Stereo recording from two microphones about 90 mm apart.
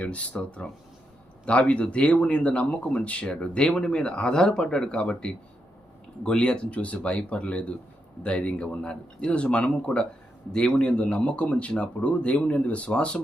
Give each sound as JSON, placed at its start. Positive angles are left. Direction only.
{"t": 0.0, "sound": "speech", "side_deg": 15}